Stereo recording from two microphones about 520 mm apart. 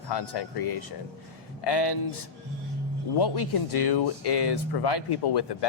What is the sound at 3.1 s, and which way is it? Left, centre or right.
Speech, left.